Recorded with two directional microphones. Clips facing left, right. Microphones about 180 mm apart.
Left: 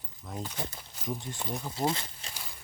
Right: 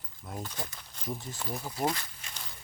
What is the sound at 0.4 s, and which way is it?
Speech, 20° left (ahead or behind).